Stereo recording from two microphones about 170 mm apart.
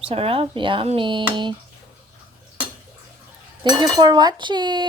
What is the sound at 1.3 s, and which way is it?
Cutlery, 30° right (ahead or behind).